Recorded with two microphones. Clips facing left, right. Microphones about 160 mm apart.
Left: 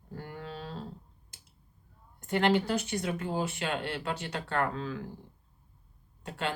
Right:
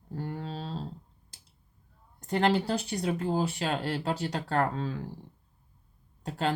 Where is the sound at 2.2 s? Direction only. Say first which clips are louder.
Right 1 dB; 35° right (ahead or behind).